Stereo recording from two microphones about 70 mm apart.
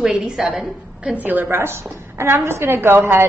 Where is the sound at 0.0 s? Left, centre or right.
Centre.